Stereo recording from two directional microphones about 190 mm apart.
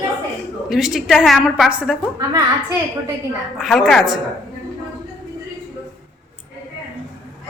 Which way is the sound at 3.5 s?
Centre (ahead or behind).